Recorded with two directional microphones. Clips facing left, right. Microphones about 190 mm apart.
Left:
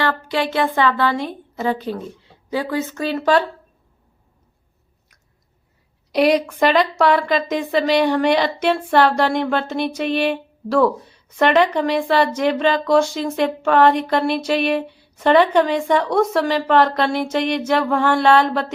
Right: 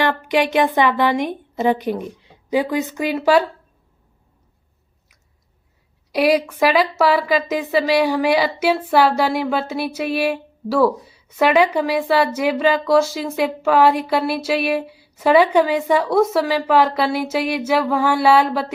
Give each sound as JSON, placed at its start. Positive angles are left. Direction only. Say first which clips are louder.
{"t": 0.0, "sound": "a woman's voice", "louder": "right 3 dB", "side_deg": -15}
{"t": 6.1, "sound": "speech", "louder": "left 1 dB", "side_deg": -5}